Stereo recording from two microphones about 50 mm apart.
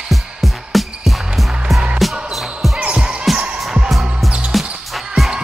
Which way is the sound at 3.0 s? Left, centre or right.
Centre.